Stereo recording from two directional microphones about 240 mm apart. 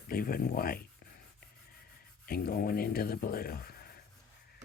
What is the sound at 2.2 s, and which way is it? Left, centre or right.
Speech, left.